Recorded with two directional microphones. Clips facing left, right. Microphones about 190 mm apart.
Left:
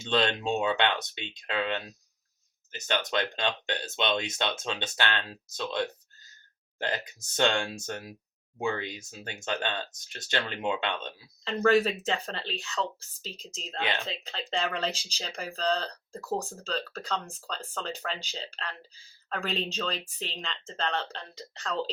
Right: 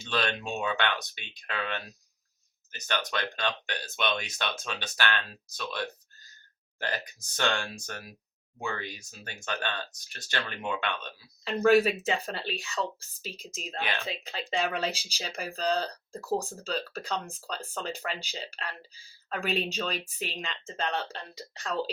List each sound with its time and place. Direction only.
0.0 s speech: 25° left (ahead or behind)
11.4 s speech: 10° right (ahead or behind)